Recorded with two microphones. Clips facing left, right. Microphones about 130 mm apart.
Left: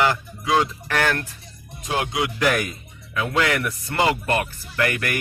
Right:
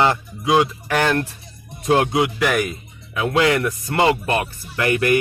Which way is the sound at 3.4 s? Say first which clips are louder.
Right 5 dB; 25° right (ahead or behind).